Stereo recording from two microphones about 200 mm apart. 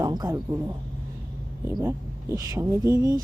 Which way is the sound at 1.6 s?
15° right (ahead or behind).